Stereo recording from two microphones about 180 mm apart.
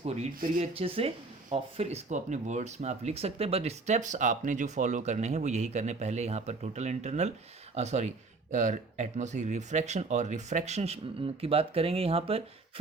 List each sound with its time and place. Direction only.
0.0 s speech: 35° right (ahead or behind)